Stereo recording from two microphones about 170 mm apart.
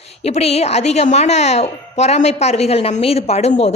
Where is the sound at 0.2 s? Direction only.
40° left (ahead or behind).